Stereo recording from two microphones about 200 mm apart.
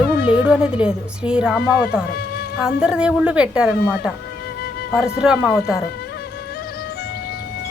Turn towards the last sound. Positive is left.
turn(degrees=-5)  # may be behind; listen again after turning